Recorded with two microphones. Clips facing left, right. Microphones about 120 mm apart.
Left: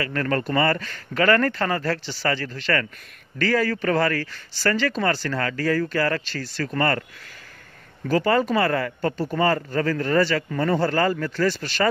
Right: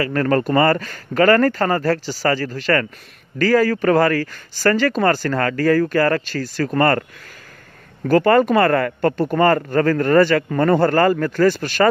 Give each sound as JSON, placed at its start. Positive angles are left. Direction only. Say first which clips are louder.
{"t": 0.0, "sound": "speech", "louder": "right 6 dB", "side_deg": -40}
{"t": 8.1, "sound": "speech", "louder": "right 6 dB", "side_deg": -55}